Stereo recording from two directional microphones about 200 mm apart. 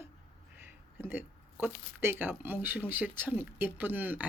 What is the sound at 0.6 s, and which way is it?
Speech, 10° right (ahead or behind).